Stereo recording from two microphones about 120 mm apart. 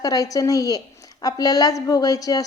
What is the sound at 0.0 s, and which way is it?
A woman's voice, 30° left (ahead or behind).